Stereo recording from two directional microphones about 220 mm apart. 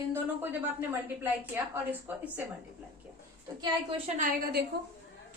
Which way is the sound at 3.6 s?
25° right (ahead or behind).